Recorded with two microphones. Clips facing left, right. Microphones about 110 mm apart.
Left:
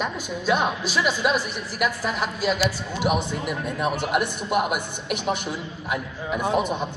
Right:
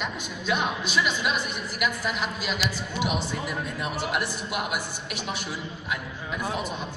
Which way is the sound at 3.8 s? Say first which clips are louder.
Left 7 dB; 55° left (ahead or behind).